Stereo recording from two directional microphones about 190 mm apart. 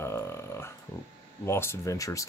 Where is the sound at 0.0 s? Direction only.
15° left (ahead or behind).